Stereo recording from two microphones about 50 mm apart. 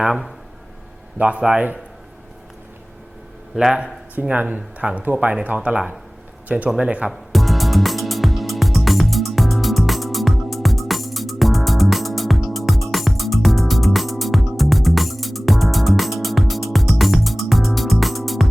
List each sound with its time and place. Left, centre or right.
0.0 s speech: centre
1.4 s speech: centre
3.5 s speech: centre
4.1 s speech: right
7.1 s music: centre